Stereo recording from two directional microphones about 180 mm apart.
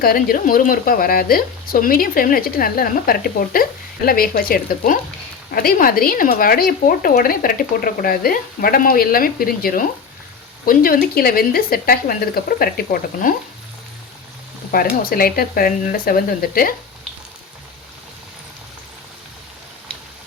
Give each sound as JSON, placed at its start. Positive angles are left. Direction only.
{"t": 0.0, "sound": "speech", "side_deg": 55}
{"t": 15.0, "sound": "speech", "side_deg": 55}